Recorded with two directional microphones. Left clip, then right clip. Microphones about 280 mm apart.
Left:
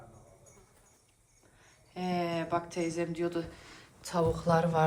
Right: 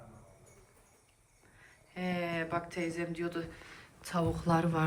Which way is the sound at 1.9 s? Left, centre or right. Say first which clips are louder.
Left 2 dB; centre.